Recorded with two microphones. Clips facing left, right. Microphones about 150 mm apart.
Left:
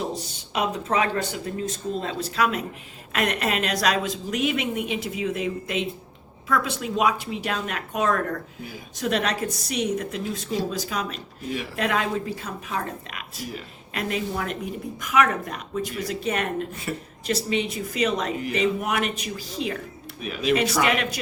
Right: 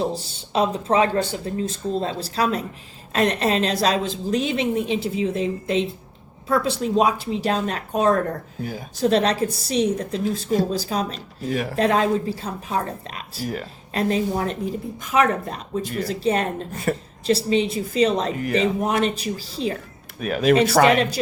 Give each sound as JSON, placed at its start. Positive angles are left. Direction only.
{"t": 0.0, "sound": "a woman's voice", "side_deg": -30}
{"t": 16.9, "sound": "speech", "side_deg": -55}
{"t": 17.2, "sound": "a woman's voice", "side_deg": -30}
{"t": 20.2, "sound": "speech", "side_deg": -50}
{"t": 20.8, "sound": "a woman's voice", "side_deg": -30}